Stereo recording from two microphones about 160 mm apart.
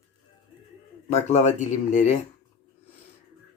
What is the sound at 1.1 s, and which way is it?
Speech, 45° left (ahead or behind).